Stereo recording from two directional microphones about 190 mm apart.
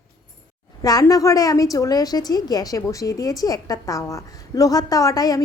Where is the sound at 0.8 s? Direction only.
20° left (ahead or behind).